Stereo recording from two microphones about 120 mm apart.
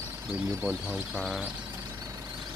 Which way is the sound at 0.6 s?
10° right (ahead or behind).